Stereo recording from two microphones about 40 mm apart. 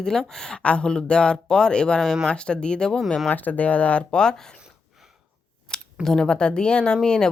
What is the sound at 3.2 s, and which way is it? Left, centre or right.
Speech, left.